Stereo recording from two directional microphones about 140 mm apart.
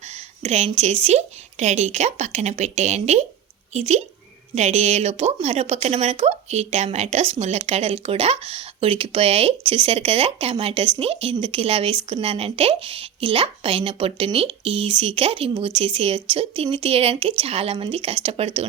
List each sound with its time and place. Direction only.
0.1 s speech: 50° right (ahead or behind)